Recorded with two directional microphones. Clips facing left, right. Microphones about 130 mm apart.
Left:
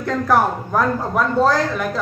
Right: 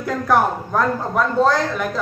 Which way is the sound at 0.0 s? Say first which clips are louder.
Left 1 dB; centre (ahead or behind).